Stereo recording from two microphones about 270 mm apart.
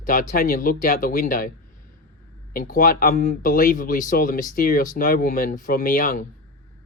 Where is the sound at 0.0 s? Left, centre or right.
Left.